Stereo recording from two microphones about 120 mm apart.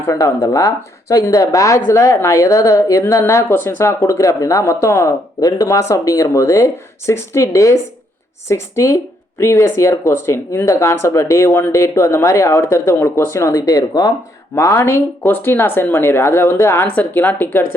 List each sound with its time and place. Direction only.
0.0 s a woman's voice: 25° left (ahead or behind)
14.5 s a woman's voice: 25° left (ahead or behind)